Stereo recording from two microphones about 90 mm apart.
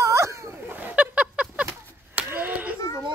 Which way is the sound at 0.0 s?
35° right (ahead or behind).